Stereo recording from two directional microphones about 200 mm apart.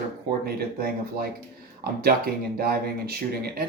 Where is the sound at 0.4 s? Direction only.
50° right (ahead or behind).